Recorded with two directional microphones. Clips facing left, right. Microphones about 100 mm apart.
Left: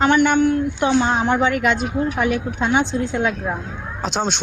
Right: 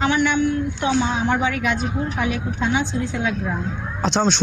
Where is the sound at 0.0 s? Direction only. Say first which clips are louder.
Left 4 dB; 55° left (ahead or behind).